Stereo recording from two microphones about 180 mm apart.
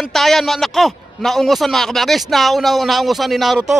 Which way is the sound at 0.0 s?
Centre (ahead or behind).